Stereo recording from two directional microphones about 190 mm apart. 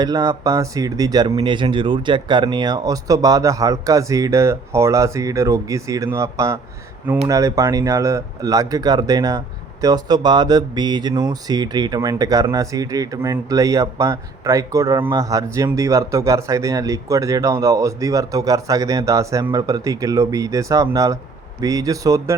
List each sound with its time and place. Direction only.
0.0 s speech: 20° right (ahead or behind)